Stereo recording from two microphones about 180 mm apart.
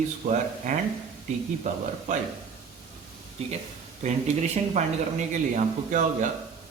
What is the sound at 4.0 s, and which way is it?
Speech, 40° right (ahead or behind).